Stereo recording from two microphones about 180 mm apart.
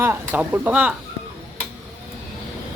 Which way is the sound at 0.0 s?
10° right (ahead or behind).